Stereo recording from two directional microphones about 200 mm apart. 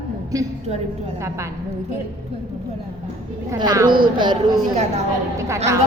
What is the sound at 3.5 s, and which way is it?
Speech, 20° right (ahead or behind).